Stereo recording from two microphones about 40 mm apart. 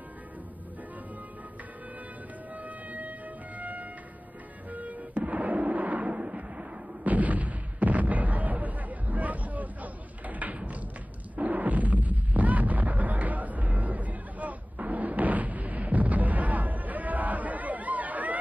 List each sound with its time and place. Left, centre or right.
2.5 s music: right
7.0 s artillery fire: right